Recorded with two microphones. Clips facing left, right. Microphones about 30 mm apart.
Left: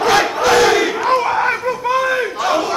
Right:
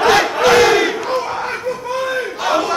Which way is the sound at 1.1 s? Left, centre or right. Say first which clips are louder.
Left 5 dB; left.